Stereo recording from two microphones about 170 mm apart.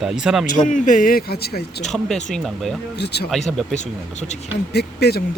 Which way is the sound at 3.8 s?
40° left (ahead or behind).